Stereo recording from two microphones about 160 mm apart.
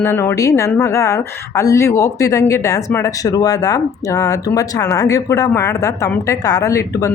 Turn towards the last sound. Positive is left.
turn(degrees=20)  # may be behind; listen again after turning